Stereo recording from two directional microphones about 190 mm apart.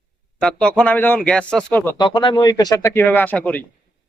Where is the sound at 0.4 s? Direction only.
5° left (ahead or behind).